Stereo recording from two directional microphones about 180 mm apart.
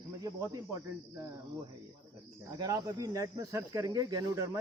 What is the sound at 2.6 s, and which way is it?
Speech, 20° right (ahead or behind).